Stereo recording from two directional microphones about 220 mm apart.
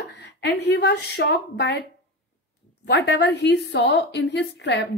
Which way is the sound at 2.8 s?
50° left (ahead or behind).